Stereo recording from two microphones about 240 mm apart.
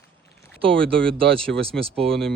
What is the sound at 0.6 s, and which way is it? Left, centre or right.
Speech, centre.